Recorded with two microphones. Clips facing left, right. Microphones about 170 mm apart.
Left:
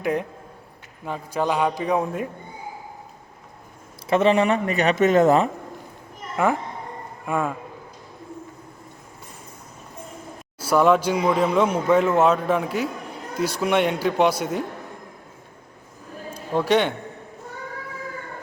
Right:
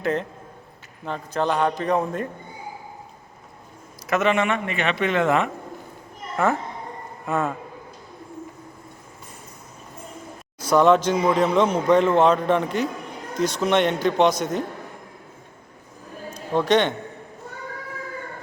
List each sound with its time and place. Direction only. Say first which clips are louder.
0.0 s a man's voice: even; 10° left (ahead or behind)
4.0 s speech: left 3 dB; 30° left (ahead or behind)
6.3 s a man's voice: even; 15° left (ahead or behind)
10.6 s a man's voice: right 1 dB; 10° left (ahead or behind)
16.3 s a man's voice: right 1 dB; 10° left (ahead or behind)